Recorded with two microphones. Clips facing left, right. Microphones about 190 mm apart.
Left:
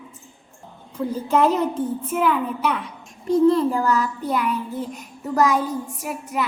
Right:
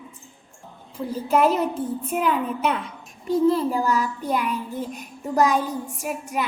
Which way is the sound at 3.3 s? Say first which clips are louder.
Left 3 dB; 5° right (ahead or behind).